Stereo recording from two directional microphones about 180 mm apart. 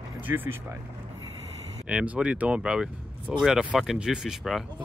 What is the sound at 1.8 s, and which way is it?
Speech, 5° right (ahead or behind).